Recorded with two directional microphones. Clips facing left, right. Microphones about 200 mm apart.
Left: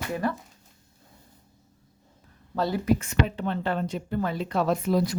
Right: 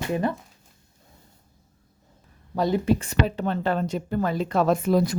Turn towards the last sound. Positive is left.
turn(degrees=-50)  # may be behind; listen again after turning